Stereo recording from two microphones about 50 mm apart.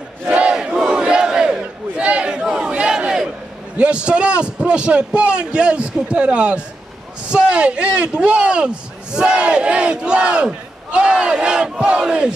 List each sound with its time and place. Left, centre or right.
0.3 s battle cry: right
0.6 s battle cry: centre
2.4 s crowd: centre
3.7 s speech: right